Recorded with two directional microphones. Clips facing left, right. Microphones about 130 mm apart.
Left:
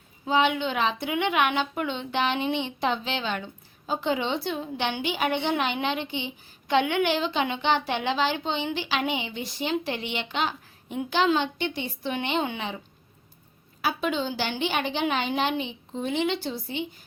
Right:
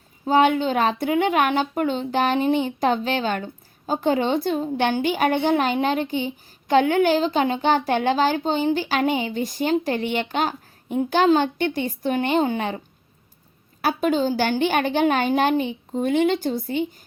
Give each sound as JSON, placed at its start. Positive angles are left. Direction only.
{"t": 0.3, "sound": "speech", "side_deg": -45}
{"t": 13.8, "sound": "speech", "side_deg": -45}